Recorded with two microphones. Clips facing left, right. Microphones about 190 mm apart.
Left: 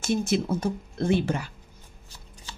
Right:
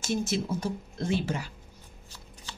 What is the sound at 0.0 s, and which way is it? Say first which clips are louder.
A woman's voice: left 4 dB; 60° left (ahead or behind).